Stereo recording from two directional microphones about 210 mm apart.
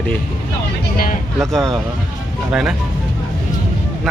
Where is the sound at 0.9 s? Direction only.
45° left (ahead or behind).